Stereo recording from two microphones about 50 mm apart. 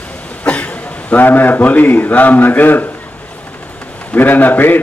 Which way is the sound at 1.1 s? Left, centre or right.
Left.